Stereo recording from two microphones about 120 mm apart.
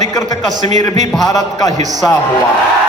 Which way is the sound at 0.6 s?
90° right.